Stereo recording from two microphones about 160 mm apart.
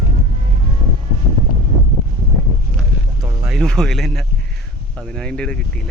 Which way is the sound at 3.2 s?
20° right (ahead or behind).